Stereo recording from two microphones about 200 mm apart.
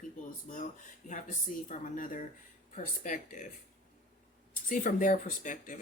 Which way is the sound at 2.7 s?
40° left (ahead or behind).